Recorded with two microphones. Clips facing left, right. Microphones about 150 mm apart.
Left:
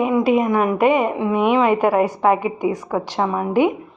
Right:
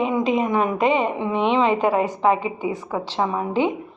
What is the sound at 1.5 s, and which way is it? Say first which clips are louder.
Speech: left 2 dB; 25° right (ahead or behind).